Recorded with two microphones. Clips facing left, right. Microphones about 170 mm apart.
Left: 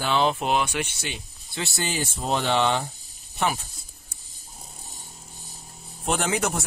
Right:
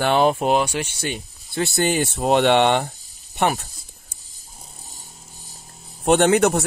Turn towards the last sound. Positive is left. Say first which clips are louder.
# right 10 dB
turn(degrees=-65)  # may be behind; listen again after turning